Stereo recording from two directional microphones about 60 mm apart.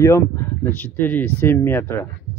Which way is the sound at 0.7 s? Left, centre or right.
Left.